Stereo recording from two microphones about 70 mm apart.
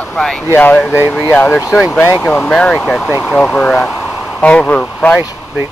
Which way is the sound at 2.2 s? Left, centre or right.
Centre.